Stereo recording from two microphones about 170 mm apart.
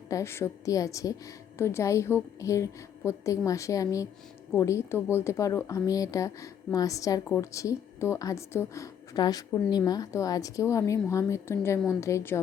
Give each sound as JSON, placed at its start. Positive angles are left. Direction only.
{"t": 0.1, "sound": "a woman's voice", "side_deg": 15}